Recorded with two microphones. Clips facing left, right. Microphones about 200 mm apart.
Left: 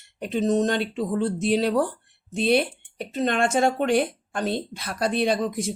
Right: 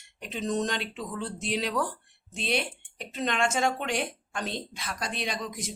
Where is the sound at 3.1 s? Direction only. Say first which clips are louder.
Left 6 dB; 45° left (ahead or behind).